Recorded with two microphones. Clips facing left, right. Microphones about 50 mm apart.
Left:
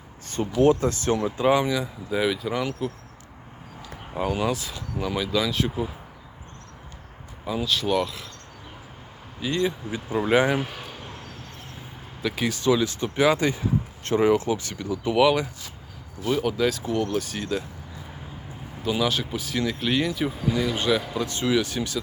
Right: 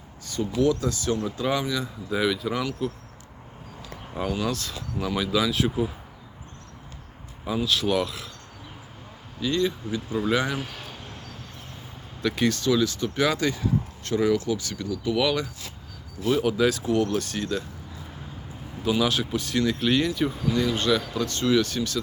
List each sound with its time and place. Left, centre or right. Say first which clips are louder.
0.3 s speech: left 3 dB; left
1.2 s speech: left 5 dB; left
1.8 s speech: left 1 dB; centre
4.3 s speech: left 2 dB; centre
7.4 s speech: right 1 dB; centre
9.4 s speech: even; centre
10.7 s cricket: left 2 dB; centre
12.2 s speech: right 3 dB; centre
12.6 s speech: left 1 dB; left
16.2 s speech: right 1 dB; centre
18.8 s speech: right 1 dB; centre